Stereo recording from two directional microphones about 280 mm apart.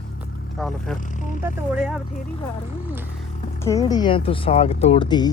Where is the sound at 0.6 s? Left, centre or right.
Centre.